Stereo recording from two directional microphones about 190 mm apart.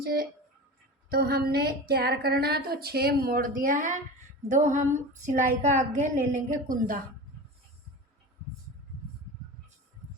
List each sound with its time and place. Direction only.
0.0 s a woman's voice: 55° right (ahead or behind)